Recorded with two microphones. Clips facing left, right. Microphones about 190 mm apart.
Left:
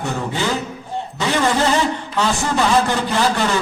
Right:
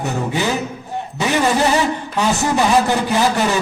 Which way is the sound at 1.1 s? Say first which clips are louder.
Right 2 dB; 15° right (ahead or behind).